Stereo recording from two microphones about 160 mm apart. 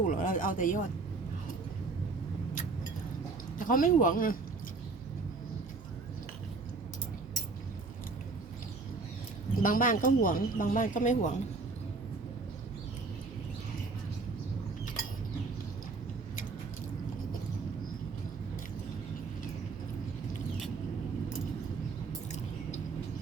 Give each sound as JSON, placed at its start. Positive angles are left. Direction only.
{"t": 0.0, "sound": "speech", "side_deg": 55}
{"t": 3.6, "sound": "speech", "side_deg": 55}
{"t": 9.6, "sound": "speech", "side_deg": 60}